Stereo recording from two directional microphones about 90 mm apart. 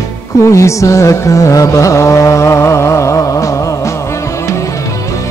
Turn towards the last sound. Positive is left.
turn(degrees=35)  # may be behind; listen again after turning